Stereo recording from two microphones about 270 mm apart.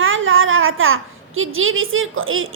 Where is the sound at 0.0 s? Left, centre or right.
Right.